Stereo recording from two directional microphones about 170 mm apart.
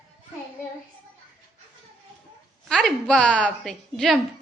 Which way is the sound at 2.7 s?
5° left (ahead or behind).